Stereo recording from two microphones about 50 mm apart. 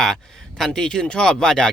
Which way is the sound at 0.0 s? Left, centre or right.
Centre.